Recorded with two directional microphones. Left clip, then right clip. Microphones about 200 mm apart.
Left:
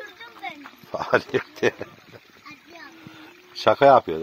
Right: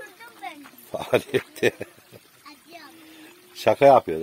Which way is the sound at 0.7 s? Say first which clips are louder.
Left 2 dB; 15° right (ahead or behind).